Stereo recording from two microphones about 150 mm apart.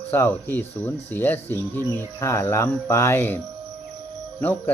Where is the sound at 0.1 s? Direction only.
15° left (ahead or behind).